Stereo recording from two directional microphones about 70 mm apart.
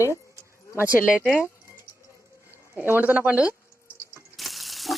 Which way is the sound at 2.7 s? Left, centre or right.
Right.